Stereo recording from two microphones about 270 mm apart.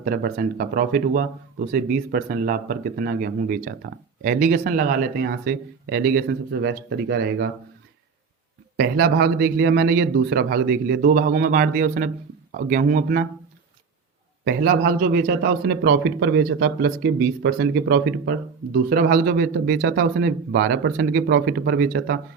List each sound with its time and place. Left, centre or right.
0.0 s a man's voice: right
8.8 s a man's voice: right
14.4 s a man's voice: right